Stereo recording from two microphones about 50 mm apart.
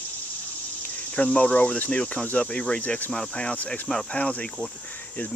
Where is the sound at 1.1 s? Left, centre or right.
Left.